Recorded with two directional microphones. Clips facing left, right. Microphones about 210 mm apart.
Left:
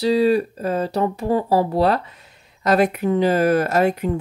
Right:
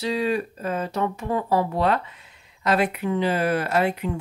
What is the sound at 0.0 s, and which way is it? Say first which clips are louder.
Speech: left 7 dB; 35° left (ahead or behind).